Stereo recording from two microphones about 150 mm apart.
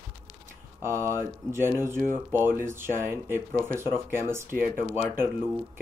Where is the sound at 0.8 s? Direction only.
15° right (ahead or behind).